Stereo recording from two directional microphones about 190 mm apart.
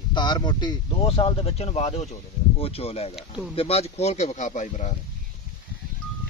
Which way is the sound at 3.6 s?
35° left (ahead or behind).